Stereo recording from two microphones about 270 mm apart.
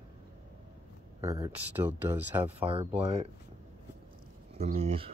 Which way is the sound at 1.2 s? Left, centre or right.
Centre.